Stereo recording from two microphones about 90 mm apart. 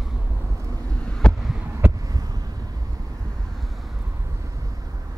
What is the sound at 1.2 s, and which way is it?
Heart sounds, 10° left (ahead or behind).